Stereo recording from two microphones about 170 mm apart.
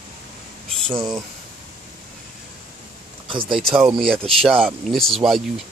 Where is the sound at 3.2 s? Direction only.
30° right (ahead or behind).